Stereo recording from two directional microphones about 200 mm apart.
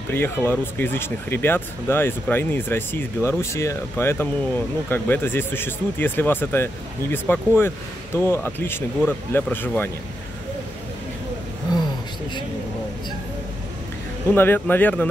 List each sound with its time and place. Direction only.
0.1 s speech: 10° left (ahead or behind)
14.3 s speech: 10° left (ahead or behind)